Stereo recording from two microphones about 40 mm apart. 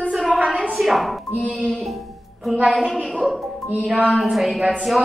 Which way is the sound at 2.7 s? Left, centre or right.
Centre.